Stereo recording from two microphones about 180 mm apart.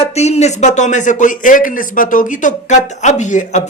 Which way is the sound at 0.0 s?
35° left (ahead or behind).